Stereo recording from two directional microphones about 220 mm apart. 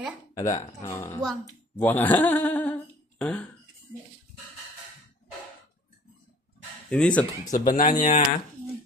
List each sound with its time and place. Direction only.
0.4 s speech: 15° left (ahead or behind)
6.9 s speech: 5° left (ahead or behind)
7.6 s speech: 40° left (ahead or behind)